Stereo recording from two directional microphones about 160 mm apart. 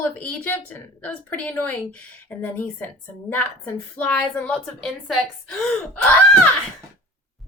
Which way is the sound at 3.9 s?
10° left (ahead or behind).